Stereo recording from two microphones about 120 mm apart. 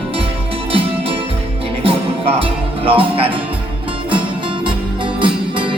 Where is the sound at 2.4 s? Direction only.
50° right (ahead or behind).